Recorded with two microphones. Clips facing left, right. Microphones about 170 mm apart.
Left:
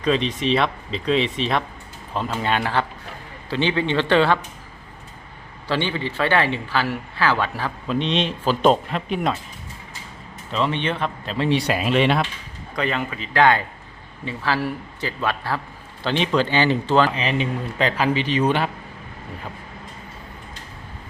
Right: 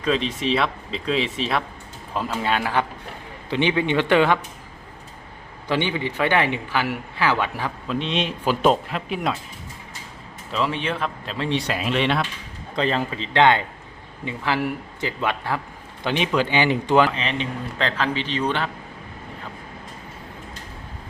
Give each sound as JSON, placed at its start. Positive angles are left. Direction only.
{"t": 0.0, "sound": "speech", "side_deg": 0}
{"t": 3.5, "sound": "speech", "side_deg": -15}
{"t": 5.6, "sound": "speech", "side_deg": -15}
{"t": 7.9, "sound": "speech", "side_deg": -5}
{"t": 10.5, "sound": "speech", "side_deg": 0}
{"t": 12.7, "sound": "a man's voice", "side_deg": -30}
{"t": 17.2, "sound": "speech", "side_deg": 5}